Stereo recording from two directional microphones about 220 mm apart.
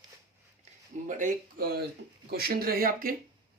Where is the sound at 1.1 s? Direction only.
35° right (ahead or behind).